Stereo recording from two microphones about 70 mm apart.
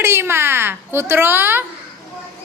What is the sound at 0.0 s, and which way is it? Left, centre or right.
A woman's voice, right.